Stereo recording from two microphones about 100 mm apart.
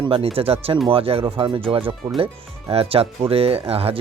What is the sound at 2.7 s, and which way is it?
Speech, 75° right (ahead or behind).